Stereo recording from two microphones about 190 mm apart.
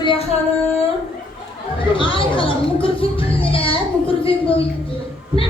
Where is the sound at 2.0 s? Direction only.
25° left (ahead or behind).